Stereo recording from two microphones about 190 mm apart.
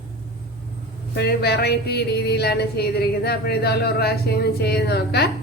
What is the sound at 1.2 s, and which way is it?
Speech, 60° left (ahead or behind).